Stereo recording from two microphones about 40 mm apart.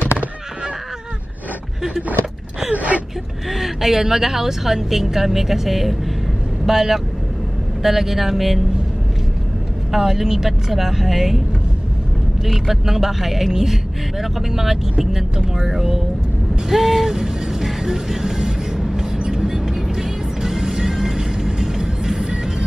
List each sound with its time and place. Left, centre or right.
2.7 s speech: right
3.4 s a woman's voice: centre
9.9 s speech: centre
12.4 s speech: centre
16.6 s music: centre